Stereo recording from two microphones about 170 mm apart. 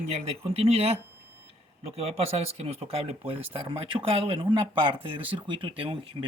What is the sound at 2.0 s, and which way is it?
Speech, 35° right (ahead or behind).